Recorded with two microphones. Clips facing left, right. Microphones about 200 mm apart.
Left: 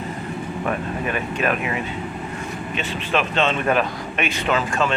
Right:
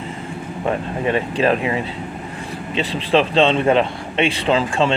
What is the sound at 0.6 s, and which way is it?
Speech, 25° right (ahead or behind).